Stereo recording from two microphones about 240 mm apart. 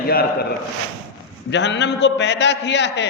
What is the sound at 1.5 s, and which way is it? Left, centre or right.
A man's voice, left.